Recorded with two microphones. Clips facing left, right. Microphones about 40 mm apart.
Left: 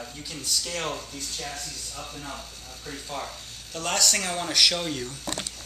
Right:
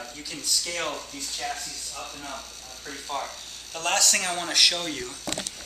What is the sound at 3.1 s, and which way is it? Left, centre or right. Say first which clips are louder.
Speech: right 4 dB; centre.